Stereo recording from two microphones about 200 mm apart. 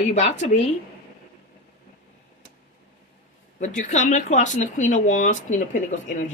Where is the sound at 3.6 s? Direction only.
35° left (ahead or behind).